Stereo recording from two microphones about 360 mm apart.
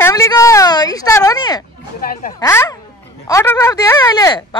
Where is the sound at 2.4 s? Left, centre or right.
Centre.